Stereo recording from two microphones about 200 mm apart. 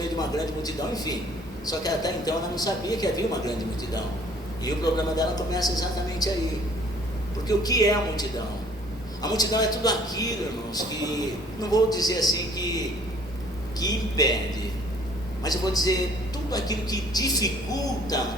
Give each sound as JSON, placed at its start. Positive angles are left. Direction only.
{"t": 0.2, "sound": "a man's voice", "side_deg": 20}
{"t": 4.6, "sound": "a man's voice", "side_deg": 20}
{"t": 7.4, "sound": "a man's voice", "side_deg": 20}
{"t": 13.7, "sound": "a man's voice", "side_deg": 20}
{"t": 15.4, "sound": "a man's voice", "side_deg": 20}